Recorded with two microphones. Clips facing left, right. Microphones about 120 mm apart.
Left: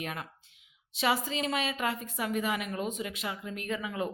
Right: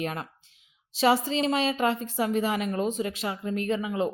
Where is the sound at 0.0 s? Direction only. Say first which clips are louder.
Right 6 dB; 35° right (ahead or behind).